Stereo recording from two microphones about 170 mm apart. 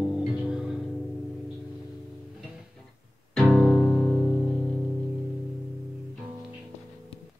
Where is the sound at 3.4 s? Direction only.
Centre (ahead or behind).